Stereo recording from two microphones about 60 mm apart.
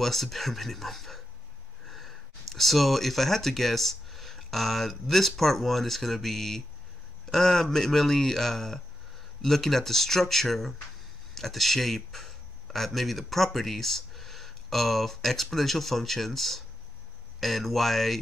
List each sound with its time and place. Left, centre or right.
0.0 s speech: centre
1.9 s a sound: centre
2.5 s speech: centre